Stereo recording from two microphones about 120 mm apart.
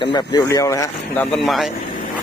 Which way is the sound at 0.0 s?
40° left (ahead or behind).